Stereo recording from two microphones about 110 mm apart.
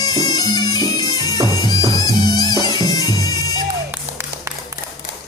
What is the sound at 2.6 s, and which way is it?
Bagpipes, 35° left (ahead or behind).